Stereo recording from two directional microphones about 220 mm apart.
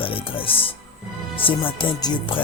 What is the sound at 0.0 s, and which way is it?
Speech, 25° left (ahead or behind).